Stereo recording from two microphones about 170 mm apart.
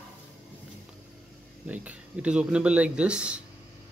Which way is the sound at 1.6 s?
10° right (ahead or behind).